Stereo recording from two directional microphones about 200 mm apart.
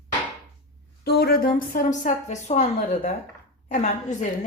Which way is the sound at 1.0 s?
55° left (ahead or behind).